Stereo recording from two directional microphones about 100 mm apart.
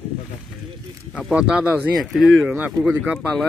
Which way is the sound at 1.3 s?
10° right (ahead or behind).